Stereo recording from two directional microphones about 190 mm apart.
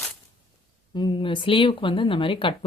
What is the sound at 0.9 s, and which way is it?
Speech, 25° left (ahead or behind).